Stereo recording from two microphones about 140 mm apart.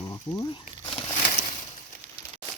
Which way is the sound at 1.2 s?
65° left (ahead or behind).